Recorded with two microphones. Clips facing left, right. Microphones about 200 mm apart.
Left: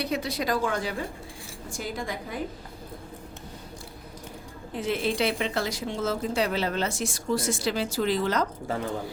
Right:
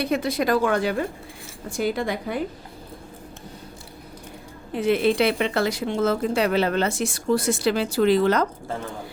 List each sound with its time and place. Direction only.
0.0 s a woman's voice: 50° right (ahead or behind); by 2.4 s 70° right (ahead or behind)
4.7 s a woman's voice: 65° right (ahead or behind)